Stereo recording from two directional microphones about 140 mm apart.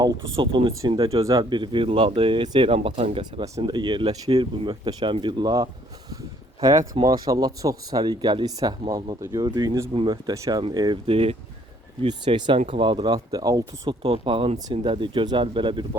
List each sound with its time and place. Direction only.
0.3 s speech: 40° right (ahead or behind)
0.8 s speech: 25° right (ahead or behind); by 3.4 s 45° right (ahead or behind)
3.6 s speech: 35° right (ahead or behind)
9.9 s speech: 40° right (ahead or behind)
10.2 s speech: 25° right (ahead or behind)
14.0 s speech: 40° right (ahead or behind)